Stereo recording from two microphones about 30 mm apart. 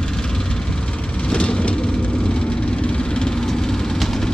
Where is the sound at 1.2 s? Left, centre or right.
Left; by 4.2 s centre.